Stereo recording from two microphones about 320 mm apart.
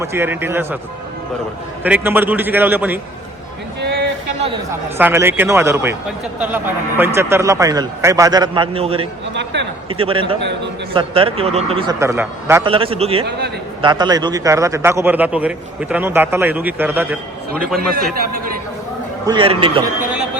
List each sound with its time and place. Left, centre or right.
0.0 s a man's voice: centre
1.8 s a man's voice: centre
4.9 s a man's voice: centre
9.3 s speech: right
9.9 s a man's voice: centre
17.7 s a man's voice: right
19.2 s a man's voice: centre